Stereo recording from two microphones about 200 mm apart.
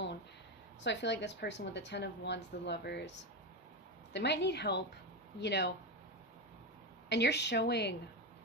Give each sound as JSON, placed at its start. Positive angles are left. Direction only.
{"t": 0.8, "sound": "a woman's voice", "side_deg": 60}
{"t": 7.1, "sound": "a woman's voice", "side_deg": 60}